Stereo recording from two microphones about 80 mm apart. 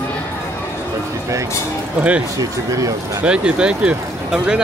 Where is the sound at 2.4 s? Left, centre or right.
Right.